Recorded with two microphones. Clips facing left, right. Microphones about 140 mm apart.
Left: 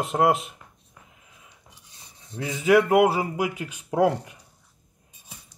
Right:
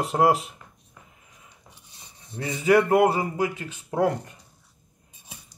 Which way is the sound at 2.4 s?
Centre (ahead or behind).